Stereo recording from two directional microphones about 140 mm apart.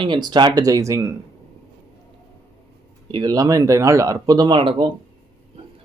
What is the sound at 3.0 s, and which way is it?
Speech, 30° right (ahead or behind).